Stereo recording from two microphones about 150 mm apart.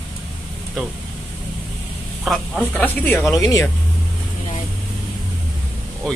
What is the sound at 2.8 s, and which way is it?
Speech, 10° left (ahead or behind).